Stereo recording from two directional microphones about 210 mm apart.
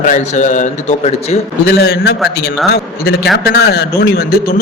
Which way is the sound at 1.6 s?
50° left (ahead or behind).